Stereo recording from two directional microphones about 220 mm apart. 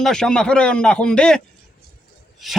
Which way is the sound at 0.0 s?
5° left (ahead or behind).